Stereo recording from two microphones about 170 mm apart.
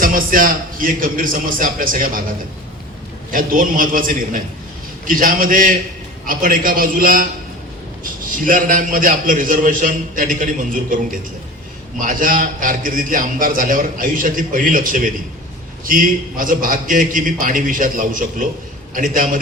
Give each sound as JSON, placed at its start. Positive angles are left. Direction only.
{"t": 0.0, "sound": "a man's voice", "side_deg": -55}
{"t": 3.3, "sound": "a man's voice", "side_deg": -55}